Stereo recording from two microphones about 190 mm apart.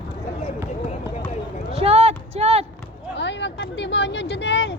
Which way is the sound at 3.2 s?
65° left (ahead or behind).